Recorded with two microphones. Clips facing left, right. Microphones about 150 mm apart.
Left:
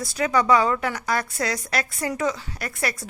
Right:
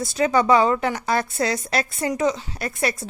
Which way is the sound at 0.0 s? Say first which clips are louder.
Right 3 dB; 25° right (ahead or behind).